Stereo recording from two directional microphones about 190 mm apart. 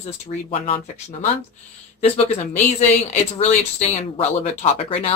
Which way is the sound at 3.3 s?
35° left (ahead or behind).